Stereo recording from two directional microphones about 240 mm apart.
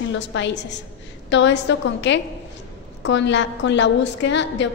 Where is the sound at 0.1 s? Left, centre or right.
Left.